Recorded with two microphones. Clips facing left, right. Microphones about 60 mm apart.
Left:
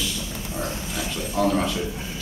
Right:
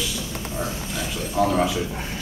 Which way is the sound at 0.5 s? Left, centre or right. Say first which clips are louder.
Even; centre.